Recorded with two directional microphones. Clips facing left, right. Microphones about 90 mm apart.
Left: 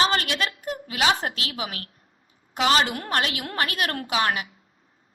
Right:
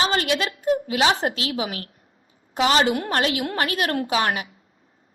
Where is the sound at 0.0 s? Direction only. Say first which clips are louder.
Right 1 dB; 25° right (ahead or behind).